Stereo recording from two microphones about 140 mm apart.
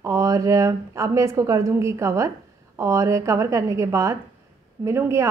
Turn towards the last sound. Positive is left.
turn(degrees=-20)  # may be behind; listen again after turning